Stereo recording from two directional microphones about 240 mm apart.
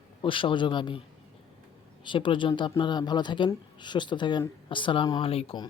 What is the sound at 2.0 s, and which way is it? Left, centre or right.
Speech, centre.